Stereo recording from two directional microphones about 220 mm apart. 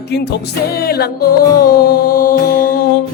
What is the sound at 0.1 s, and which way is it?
Music, 45° left (ahead or behind).